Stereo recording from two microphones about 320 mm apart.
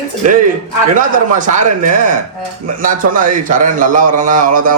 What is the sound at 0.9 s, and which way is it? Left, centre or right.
A man's voice, right.